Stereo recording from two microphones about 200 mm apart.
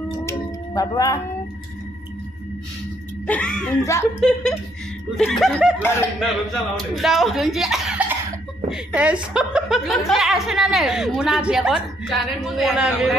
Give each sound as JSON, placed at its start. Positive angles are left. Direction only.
{"t": 0.2, "sound": "a sound", "side_deg": 15}
{"t": 3.3, "sound": "a woman's voice", "side_deg": 5}
{"t": 4.2, "sound": "a woman's voice", "side_deg": 5}
{"t": 5.8, "sound": "speech", "side_deg": 10}
{"t": 7.0, "sound": "a woman's voice", "side_deg": 0}